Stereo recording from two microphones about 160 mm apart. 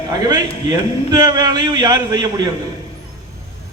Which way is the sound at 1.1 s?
25° right (ahead or behind).